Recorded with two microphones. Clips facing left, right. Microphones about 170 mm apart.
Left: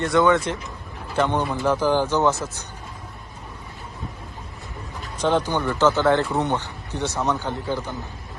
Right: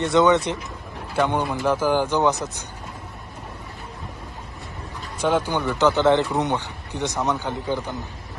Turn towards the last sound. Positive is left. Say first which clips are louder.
# right 1 dB
turn(degrees=-15)  # may be behind; listen again after turning